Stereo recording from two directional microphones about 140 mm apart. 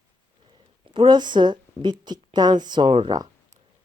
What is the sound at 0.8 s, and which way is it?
A woman's voice, 35° right (ahead or behind).